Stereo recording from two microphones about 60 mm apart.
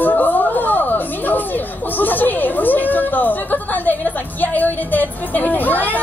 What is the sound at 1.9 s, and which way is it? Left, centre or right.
Speech, left.